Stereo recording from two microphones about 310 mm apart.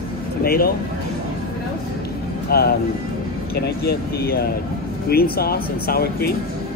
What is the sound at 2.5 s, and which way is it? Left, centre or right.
Speech, left.